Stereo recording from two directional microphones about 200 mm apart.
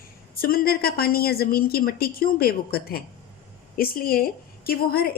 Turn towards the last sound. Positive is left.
turn(degrees=50)  # may be behind; listen again after turning